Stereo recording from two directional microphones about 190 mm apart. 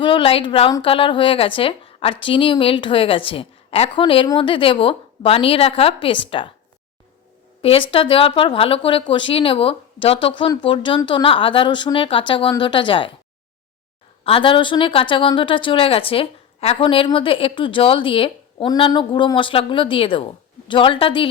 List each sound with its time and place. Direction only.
0.0 s a woman's voice: 25° left (ahead or behind)
7.6 s a woman's voice: 30° left (ahead or behind)
14.3 s a woman's voice: 30° left (ahead or behind)